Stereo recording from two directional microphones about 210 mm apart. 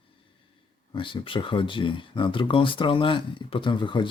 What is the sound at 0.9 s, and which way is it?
Speech, 25° left (ahead or behind).